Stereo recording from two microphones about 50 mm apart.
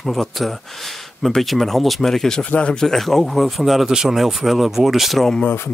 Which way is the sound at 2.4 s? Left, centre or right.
Left.